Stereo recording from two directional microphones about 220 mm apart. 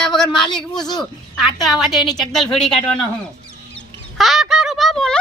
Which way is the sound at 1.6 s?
Centre (ahead or behind).